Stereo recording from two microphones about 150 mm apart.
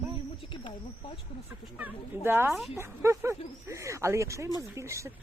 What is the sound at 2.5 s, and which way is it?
Speech, centre (ahead or behind).